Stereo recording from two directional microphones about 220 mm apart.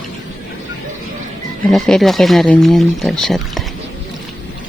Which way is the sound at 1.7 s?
Centre (ahead or behind).